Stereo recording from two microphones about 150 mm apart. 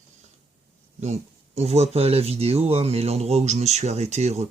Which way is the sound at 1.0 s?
45° right (ahead or behind).